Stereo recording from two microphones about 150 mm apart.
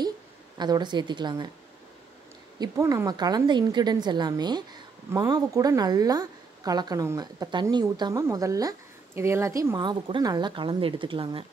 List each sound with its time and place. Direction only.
0.6 s a woman's voice: 30° right (ahead or behind)
2.6 s a woman's voice: 20° right (ahead or behind)